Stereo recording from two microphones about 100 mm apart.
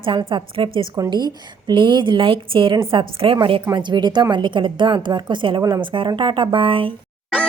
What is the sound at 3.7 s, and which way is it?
A woman's voice, 45° right (ahead or behind).